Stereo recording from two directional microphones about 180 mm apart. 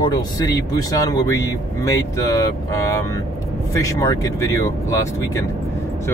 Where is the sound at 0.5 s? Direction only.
20° left (ahead or behind).